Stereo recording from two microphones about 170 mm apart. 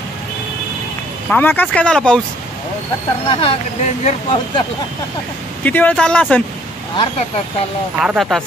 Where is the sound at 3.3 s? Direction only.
30° left (ahead or behind).